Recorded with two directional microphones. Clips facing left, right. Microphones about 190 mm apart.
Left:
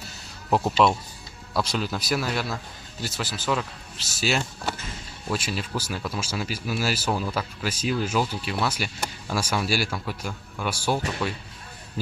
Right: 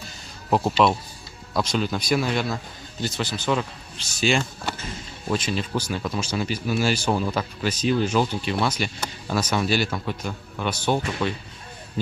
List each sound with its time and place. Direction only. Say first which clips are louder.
0.6 s speech: right 1 dB; 5° right (ahead or behind)
1.5 s speech: right 3 dB; 5° left (ahead or behind)